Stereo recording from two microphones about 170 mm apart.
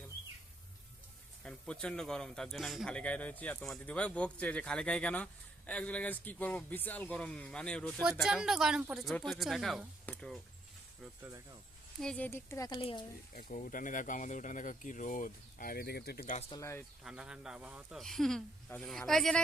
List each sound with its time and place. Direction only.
1.5 s speech: 5° left (ahead or behind)
11.2 s speech: 15° right (ahead or behind)
11.9 s speech: 5° left (ahead or behind)
12.8 s speech: 30° left (ahead or behind)
13.3 s speech: 50° left (ahead or behind)
16.5 s speech: 20° left (ahead or behind)
17.0 s speech: 5° right (ahead or behind)